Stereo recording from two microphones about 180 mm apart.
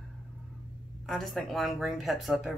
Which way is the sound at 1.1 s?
Centre (ahead or behind).